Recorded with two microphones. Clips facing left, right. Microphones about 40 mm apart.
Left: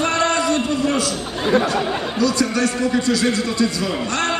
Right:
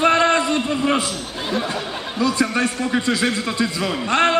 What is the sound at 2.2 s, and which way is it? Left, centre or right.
A man's voice, right.